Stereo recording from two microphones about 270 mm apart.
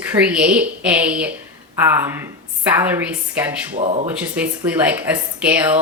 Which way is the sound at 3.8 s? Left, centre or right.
Right.